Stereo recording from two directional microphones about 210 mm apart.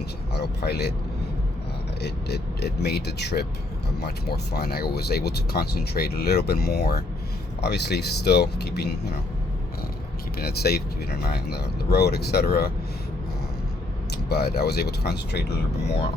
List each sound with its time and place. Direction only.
0.3 s speech: 50° left (ahead or behind)
2.0 s speech: 50° left (ahead or behind)
10.3 s speech: 50° left (ahead or behind)
14.3 s speech: 50° left (ahead or behind)